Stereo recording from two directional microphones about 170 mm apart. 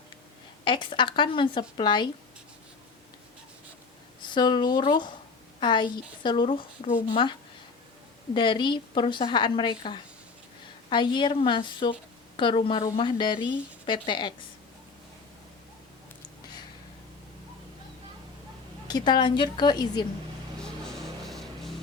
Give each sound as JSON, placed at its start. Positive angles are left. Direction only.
{"t": 0.6, "sound": "a woman's voice", "side_deg": 30}
{"t": 4.2, "sound": "a woman's voice", "side_deg": 25}
{"t": 18.9, "sound": "a woman's voice", "side_deg": 25}
{"t": 20.6, "sound": "music", "side_deg": 0}